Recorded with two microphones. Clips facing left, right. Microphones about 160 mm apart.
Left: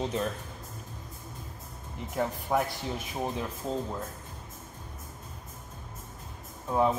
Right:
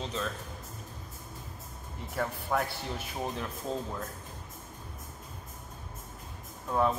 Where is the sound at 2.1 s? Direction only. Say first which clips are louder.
Left 3 dB; 15° left (ahead or behind).